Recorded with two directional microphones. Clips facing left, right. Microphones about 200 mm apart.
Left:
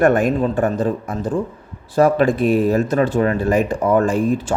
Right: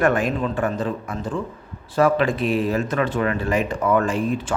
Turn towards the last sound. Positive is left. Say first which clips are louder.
# left 4 dB
turn(degrees=40)  # may be behind; listen again after turning